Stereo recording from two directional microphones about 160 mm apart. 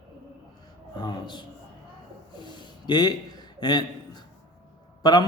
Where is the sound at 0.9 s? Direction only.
30° left (ahead or behind).